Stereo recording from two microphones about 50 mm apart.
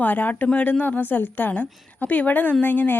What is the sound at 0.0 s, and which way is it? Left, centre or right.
A woman's voice, left.